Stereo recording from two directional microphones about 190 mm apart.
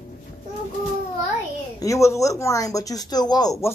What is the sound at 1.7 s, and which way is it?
Speech, 15° left (ahead or behind).